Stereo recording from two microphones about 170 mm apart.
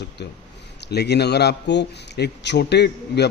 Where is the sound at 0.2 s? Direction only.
80° left.